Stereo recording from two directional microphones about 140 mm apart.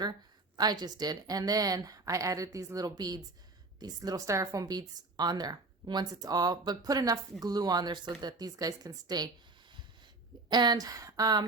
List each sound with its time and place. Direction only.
0.5 s a woman's voice: 30° right (ahead or behind)
10.5 s a woman's voice: 30° right (ahead or behind)